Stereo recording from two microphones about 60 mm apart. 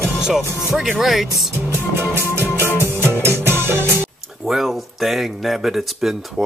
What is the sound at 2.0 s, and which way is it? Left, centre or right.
Music, right.